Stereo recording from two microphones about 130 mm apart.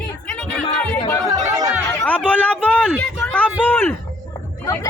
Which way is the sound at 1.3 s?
25° right (ahead or behind).